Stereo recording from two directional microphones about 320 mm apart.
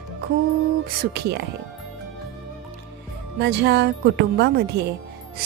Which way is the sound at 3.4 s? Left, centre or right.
Right.